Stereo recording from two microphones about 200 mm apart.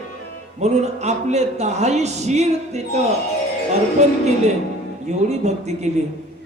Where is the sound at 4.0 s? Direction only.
35° right (ahead or behind).